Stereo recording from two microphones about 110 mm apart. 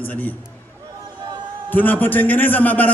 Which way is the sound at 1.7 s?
15° left (ahead or behind).